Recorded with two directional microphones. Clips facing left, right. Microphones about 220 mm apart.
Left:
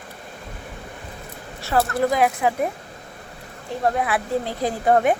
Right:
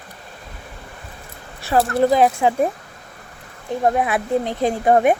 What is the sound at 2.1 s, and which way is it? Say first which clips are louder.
Speech: right 4 dB; 30° right (ahead or behind).